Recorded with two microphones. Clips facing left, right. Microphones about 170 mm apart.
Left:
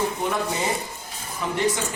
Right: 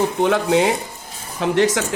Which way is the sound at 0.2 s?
80° right.